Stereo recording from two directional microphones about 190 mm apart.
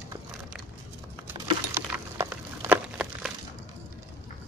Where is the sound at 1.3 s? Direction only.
10° right (ahead or behind).